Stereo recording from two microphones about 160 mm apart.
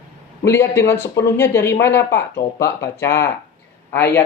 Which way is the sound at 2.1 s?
90° left.